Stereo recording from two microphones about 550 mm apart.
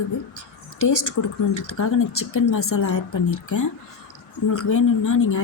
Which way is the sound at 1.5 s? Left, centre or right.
Left.